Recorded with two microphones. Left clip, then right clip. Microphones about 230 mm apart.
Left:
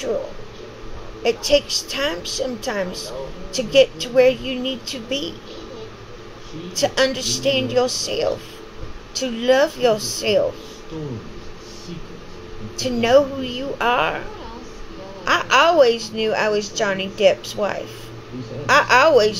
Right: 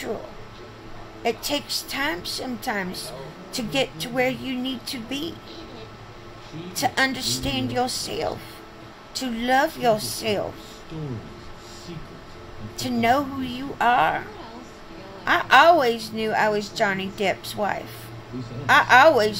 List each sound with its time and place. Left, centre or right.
1.2 s a woman's voice: centre
6.8 s a woman's voice: centre
12.7 s a woman's voice: centre
15.2 s a woman's voice: centre